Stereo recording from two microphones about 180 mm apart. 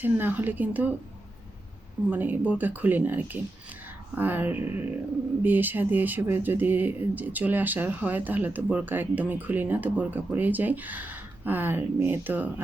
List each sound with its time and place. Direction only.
0.0 s speech: 10° right (ahead or behind)
2.0 s speech: 10° right (ahead or behind)